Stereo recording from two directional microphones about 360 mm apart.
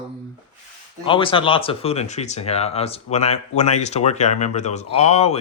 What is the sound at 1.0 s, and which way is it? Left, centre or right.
Speech, centre.